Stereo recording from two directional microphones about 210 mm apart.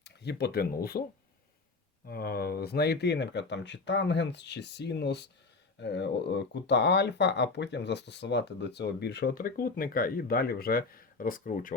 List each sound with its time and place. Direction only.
0.0 s speech: 50° left (ahead or behind)
2.0 s speech: 45° left (ahead or behind)